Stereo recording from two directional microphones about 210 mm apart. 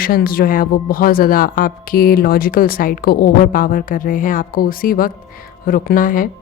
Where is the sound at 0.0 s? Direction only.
45° left (ahead or behind).